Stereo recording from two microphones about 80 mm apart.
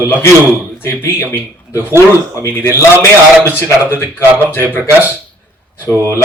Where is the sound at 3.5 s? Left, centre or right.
Left.